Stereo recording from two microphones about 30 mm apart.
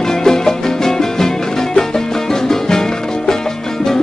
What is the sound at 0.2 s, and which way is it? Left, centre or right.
Music, centre.